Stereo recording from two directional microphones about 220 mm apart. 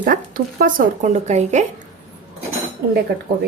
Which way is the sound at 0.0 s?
40° right (ahead or behind).